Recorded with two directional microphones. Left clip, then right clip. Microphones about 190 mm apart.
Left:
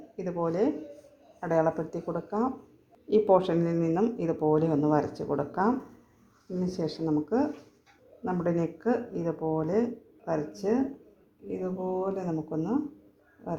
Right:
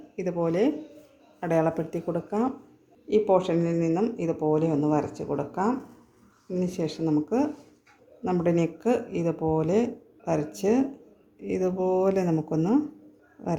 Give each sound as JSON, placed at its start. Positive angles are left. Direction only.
{"t": 0.2, "sound": "speech", "side_deg": -20}
{"t": 3.1, "sound": "speech", "side_deg": 0}
{"t": 6.7, "sound": "speech", "side_deg": -10}